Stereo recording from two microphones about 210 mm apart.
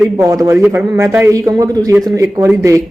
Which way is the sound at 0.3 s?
15° right (ahead or behind).